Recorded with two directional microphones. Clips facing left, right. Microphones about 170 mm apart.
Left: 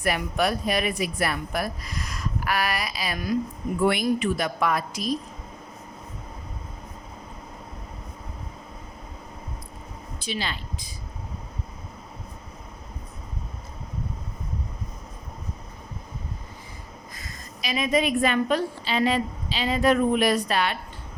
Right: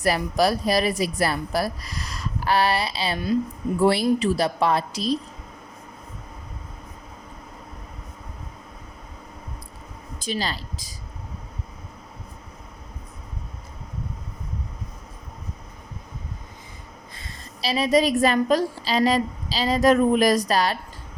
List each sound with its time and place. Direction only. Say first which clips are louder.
0.0 s speech: right 4 dB; 35° right (ahead or behind)
10.2 s speech: right 3 dB; 40° right (ahead or behind)
17.2 s a woman's voice: right 6 dB; 30° right (ahead or behind)